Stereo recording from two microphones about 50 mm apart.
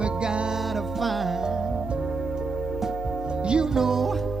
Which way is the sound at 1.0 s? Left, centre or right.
Centre.